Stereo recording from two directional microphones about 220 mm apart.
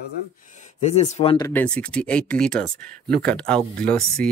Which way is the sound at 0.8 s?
30° left (ahead or behind).